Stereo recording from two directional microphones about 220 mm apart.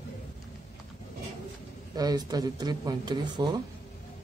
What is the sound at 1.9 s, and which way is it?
Speech, 15° right (ahead or behind).